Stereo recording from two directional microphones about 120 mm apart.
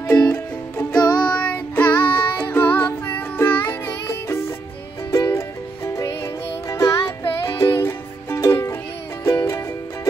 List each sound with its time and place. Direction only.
0.2 s music: 10° left (ahead or behind)
6.7 s music: 20° left (ahead or behind)